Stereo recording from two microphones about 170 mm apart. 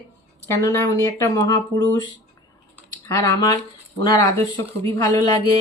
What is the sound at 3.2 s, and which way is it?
Speech, 20° left (ahead or behind).